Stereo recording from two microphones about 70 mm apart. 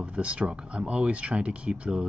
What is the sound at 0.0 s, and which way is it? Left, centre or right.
Speech, centre.